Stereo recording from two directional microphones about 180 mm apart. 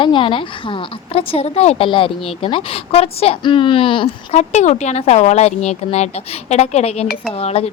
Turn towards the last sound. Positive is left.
turn(degrees=35)  # may be behind; listen again after turning